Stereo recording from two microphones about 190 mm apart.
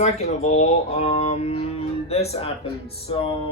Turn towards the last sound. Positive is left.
turn(degrees=30)  # may be behind; listen again after turning